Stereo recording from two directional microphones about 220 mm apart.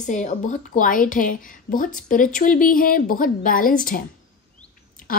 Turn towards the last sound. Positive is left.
turn(degrees=40)  # may be behind; listen again after turning